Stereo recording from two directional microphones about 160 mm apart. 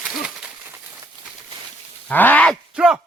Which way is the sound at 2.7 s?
5° right (ahead or behind).